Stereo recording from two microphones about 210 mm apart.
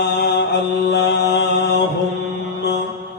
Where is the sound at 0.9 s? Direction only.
50° left (ahead or behind).